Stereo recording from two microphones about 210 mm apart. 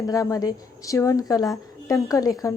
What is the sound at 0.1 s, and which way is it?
A woman's voice, 15° left (ahead or behind).